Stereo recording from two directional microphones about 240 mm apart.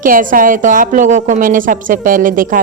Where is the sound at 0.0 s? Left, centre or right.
Right.